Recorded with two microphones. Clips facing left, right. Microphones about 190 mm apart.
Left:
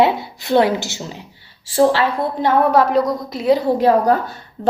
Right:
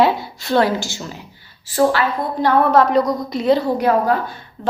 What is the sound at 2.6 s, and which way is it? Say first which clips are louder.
Speech: even; 5° left (ahead or behind).